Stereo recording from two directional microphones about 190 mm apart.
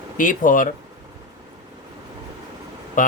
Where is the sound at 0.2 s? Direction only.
45° left (ahead or behind).